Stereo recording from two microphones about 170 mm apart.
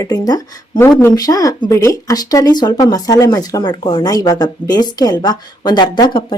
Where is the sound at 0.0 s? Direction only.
20° left (ahead or behind).